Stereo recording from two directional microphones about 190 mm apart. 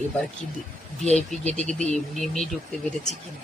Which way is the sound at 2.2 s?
5° left (ahead or behind).